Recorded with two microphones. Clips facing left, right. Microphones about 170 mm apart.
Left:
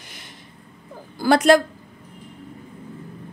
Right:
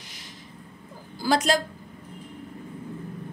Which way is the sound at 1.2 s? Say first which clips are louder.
Left 8 dB; 60° left (ahead or behind).